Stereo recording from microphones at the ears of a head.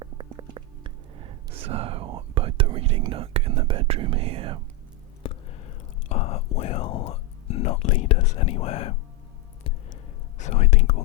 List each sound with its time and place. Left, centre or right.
0.0 s whispering: right
5.2 s whispering: left
10.3 s speech: left